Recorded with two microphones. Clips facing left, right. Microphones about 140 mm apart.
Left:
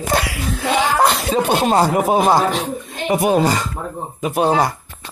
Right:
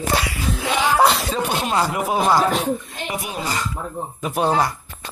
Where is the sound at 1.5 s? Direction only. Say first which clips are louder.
Left 7 dB; 35° left (ahead or behind).